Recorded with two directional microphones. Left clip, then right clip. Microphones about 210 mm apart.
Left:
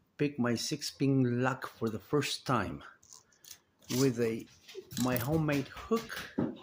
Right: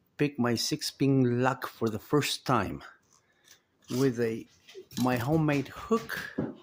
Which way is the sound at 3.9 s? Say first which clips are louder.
Right 2 dB; 25° right (ahead or behind).